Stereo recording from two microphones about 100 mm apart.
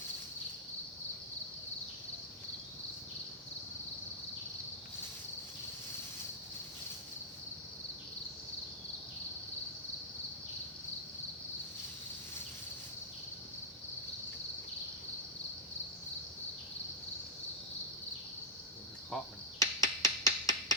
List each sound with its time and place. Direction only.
19.1 s finger snapping: 5° left (ahead or behind)
19.5 s finger snapping: 35° left (ahead or behind)